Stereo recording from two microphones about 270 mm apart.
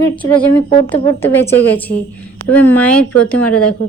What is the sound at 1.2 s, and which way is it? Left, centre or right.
Speech, centre.